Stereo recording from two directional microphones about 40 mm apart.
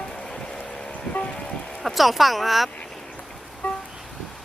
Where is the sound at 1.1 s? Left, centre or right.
Left.